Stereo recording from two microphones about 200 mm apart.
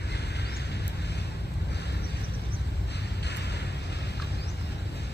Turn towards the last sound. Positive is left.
turn(degrees=55)  # may be behind; listen again after turning